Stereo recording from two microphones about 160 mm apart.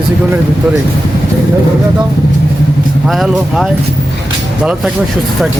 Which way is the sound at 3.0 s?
Centre (ahead or behind).